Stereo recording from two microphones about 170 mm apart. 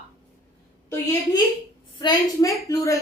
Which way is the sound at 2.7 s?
20° left (ahead or behind).